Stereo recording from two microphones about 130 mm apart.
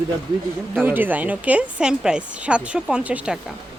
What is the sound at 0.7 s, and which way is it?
A woman's voice, 15° right (ahead or behind).